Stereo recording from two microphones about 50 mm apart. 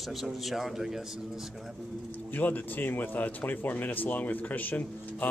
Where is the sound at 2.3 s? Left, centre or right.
Left.